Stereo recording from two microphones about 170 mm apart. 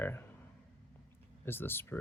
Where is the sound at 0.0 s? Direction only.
15° left (ahead or behind).